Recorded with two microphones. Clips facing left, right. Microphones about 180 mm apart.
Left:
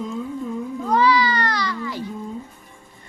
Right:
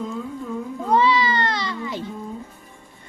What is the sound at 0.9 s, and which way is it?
Baby cry, 25° right (ahead or behind).